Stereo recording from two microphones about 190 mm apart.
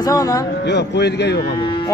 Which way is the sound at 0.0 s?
20° left (ahead or behind).